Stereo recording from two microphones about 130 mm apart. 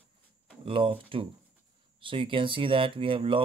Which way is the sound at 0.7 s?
45° right (ahead or behind).